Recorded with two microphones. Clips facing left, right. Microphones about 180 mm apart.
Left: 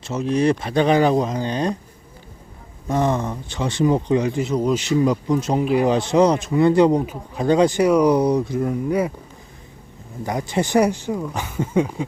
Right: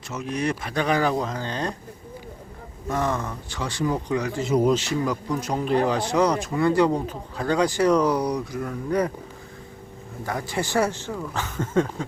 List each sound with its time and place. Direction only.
0.1 s a man's voice: 30° left (ahead or behind)
2.9 s a man's voice: 20° left (ahead or behind)
4.4 s speech: 5° right (ahead or behind)
4.7 s a man's voice: 20° left (ahead or behind)
8.9 s speech: 10° left (ahead or behind)
10.2 s speech: 20° left (ahead or behind)